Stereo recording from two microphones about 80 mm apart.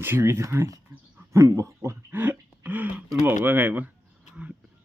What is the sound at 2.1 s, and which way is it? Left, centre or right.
Speech, right.